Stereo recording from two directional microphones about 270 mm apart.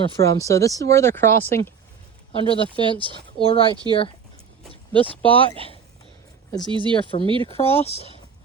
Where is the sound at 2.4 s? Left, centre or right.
Centre.